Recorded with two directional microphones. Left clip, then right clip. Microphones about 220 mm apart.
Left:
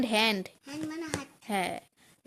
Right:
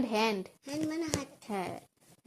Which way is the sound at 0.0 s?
35° left (ahead or behind).